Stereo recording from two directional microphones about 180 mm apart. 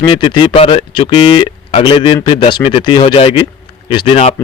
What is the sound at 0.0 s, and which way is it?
A man's voice, 30° left (ahead or behind).